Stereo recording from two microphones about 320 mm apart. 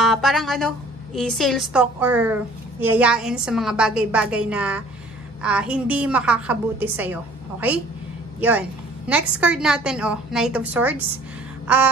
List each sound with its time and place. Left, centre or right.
0.0 s a woman's voice: centre
8.4 s a woman's voice: centre
11.6 s a sound: centre